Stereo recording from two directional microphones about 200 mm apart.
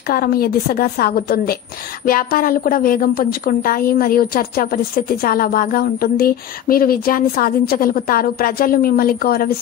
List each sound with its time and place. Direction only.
0.1 s a woman's voice: 50° left (ahead or behind)